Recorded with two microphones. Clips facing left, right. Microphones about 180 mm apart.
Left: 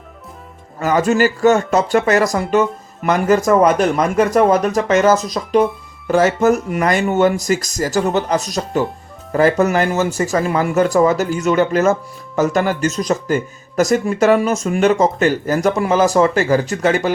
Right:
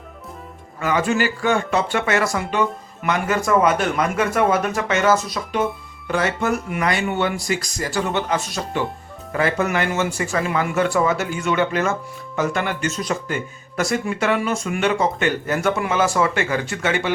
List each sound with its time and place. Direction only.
0.8 s speech: 40° left (ahead or behind)